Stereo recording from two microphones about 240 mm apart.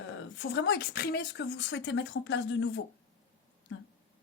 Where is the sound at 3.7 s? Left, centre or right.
Left.